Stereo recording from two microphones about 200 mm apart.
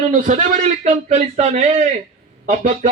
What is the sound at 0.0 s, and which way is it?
A man's voice, 40° right (ahead or behind).